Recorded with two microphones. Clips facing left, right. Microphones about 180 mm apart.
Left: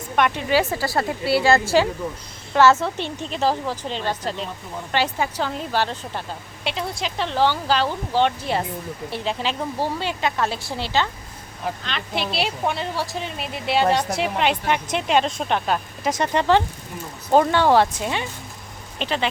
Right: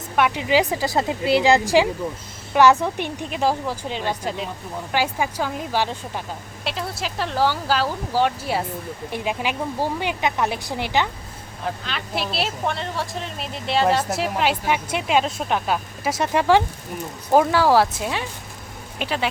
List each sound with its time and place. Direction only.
0.2 s speech: 5° right (ahead or behind)
0.4 s speech: 15° right (ahead or behind)
11.6 s speech: 5° right (ahead or behind)